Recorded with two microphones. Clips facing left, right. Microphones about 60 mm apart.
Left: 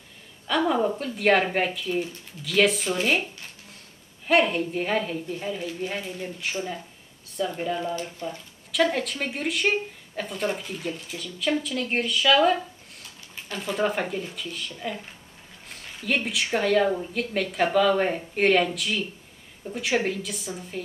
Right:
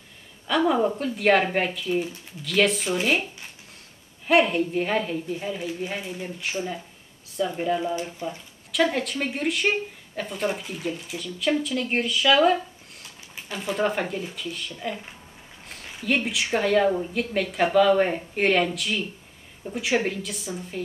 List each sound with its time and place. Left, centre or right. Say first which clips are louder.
0.5 s speech: right 2 dB; centre
4.3 s speech: right 2 dB; centre
8.7 s speech: even; centre
15.7 s a sound: right 2 dB; centre
16.5 s speech: right 1 dB; centre